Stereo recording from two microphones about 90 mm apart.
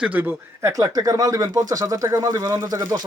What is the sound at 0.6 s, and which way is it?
Speech, 40° right (ahead or behind).